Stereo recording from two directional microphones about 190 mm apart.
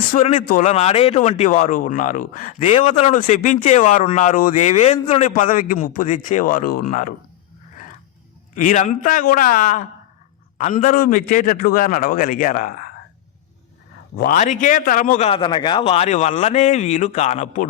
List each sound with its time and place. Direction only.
0.1 s speech: 40° left (ahead or behind)
5.3 s a man's voice: 45° left (ahead or behind)
8.5 s a man's voice: 40° left (ahead or behind)
14.2 s a man's voice: 45° left (ahead or behind)
15.3 s speech: 25° left (ahead or behind)